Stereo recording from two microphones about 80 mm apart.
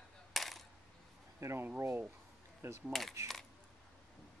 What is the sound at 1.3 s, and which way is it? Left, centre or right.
Speech, right.